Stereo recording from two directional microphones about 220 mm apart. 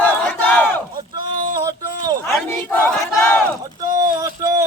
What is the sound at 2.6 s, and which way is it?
Battle cry, 10° left (ahead or behind).